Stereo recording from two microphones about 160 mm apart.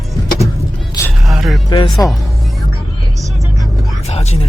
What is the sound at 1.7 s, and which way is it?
Speech, 30° left (ahead or behind).